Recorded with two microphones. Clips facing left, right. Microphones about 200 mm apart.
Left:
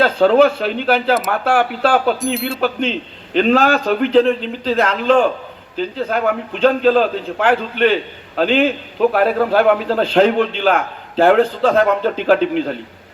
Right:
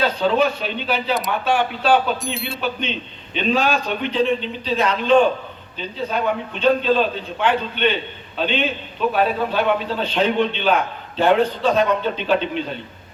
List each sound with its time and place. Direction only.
0.0 s a man's voice: 90° left
2.2 s speech: centre (ahead or behind)
2.6 s a man's voice: 90° left